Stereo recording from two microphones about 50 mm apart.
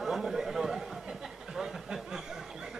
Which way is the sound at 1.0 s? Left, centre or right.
Centre.